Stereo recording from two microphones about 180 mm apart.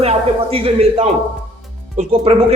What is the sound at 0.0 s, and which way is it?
Speech, 35° right (ahead or behind).